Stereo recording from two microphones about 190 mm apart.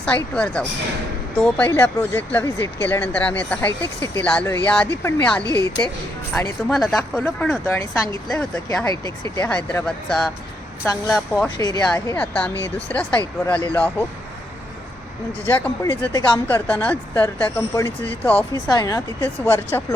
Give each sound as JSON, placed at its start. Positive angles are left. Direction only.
{"t": 0.0, "sound": "speech", "side_deg": 5}
{"t": 5.4, "sound": "speech", "side_deg": -20}
{"t": 6.3, "sound": "speech", "side_deg": 5}
{"t": 7.7, "sound": "speech", "side_deg": 15}
{"t": 11.5, "sound": "speech", "side_deg": 20}
{"t": 15.4, "sound": "speech", "side_deg": 10}
{"t": 16.1, "sound": "speech", "side_deg": 20}
{"t": 16.5, "sound": "speech", "side_deg": 10}
{"t": 18.5, "sound": "speech", "side_deg": 20}